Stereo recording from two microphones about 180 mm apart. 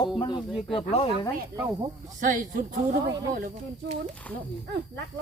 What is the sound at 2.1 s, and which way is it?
Speech, 45° right (ahead or behind).